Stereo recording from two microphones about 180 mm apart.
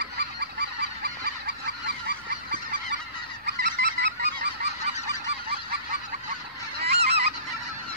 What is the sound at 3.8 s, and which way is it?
Goose, 75° right (ahead or behind).